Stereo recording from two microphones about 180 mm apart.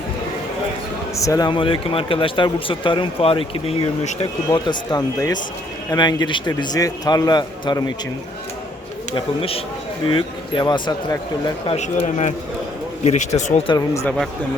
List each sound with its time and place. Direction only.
1.1 s a man's voice: 20° left (ahead or behind)
9.1 s a man's voice: 30° left (ahead or behind)
11.8 s speech: 40° left (ahead or behind)
13.7 s a man's voice: 20° left (ahead or behind)